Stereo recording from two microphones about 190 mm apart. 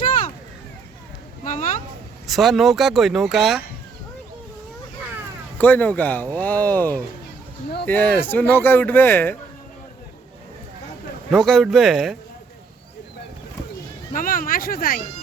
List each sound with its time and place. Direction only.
1.5 s a sound: 45° left (ahead or behind)
2.2 s speech: centre (ahead or behind)
5.5 s speech: 10° left (ahead or behind)
11.3 s speech: centre (ahead or behind)
14.1 s speech: 45° left (ahead or behind)